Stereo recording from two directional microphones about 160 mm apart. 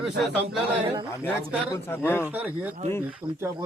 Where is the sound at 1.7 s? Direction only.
15° left (ahead or behind).